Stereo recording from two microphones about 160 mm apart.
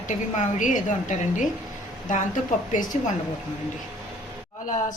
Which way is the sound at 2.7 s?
55° left (ahead or behind).